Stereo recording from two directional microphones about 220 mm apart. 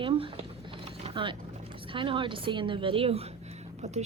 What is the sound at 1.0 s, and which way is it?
A woman's voice, 20° right (ahead or behind).